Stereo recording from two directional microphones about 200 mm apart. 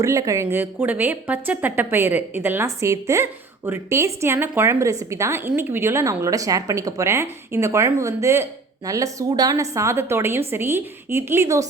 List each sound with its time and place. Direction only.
0.0 s a woman's voice: 15° right (ahead or behind)